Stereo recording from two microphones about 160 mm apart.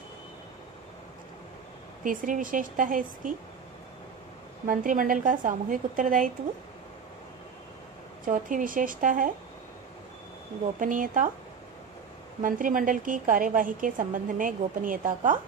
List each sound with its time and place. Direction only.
2.0 s a woman's voice: 55° right (ahead or behind)
4.6 s a woman's voice: 60° right (ahead or behind)
8.3 s a woman's voice: 55° right (ahead or behind)
10.8 s a woman's voice: 55° right (ahead or behind)
12.4 s a woman's voice: 55° right (ahead or behind)